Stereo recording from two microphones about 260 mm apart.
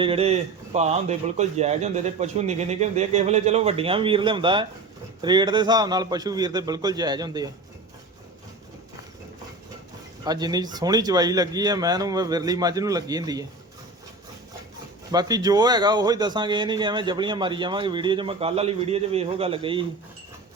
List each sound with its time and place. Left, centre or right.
0.0 s a man's voice: right
10.2 s a man's voice: centre
15.1 s a man's voice: centre